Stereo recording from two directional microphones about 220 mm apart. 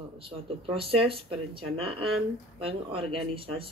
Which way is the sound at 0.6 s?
25° right (ahead or behind).